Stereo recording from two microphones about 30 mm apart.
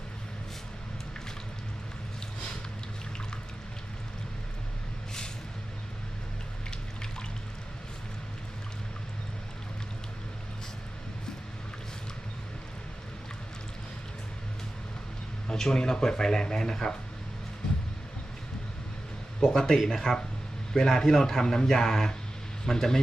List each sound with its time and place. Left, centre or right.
6.7 s water: left
15.4 s speech: left
19.4 s a man's voice: left